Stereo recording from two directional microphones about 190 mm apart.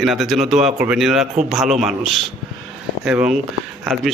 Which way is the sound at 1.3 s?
35° right (ahead or behind).